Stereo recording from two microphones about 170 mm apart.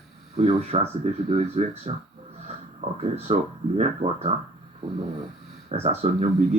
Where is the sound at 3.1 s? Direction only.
40° right (ahead or behind).